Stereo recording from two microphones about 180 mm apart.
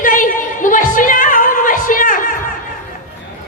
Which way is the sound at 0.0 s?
45° left (ahead or behind).